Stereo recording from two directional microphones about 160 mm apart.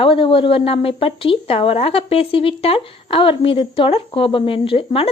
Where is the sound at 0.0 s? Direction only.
35° left (ahead or behind).